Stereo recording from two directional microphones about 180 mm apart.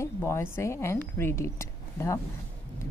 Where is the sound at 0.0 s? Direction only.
15° left (ahead or behind).